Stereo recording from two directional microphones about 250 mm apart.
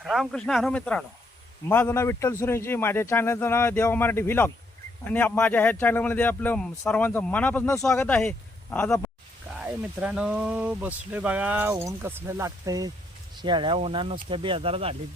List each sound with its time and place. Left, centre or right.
0.0 s speech: centre
9.6 s speech: centre; by 14.9 s right